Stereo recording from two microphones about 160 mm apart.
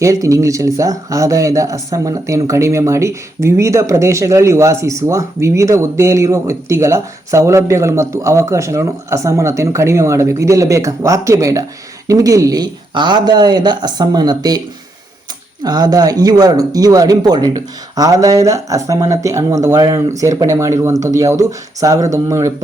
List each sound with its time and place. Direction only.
0.0 s speech: 20° right (ahead or behind)
15.6 s speech: 25° right (ahead or behind)